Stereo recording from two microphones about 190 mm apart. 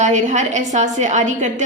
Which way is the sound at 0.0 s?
40° right (ahead or behind).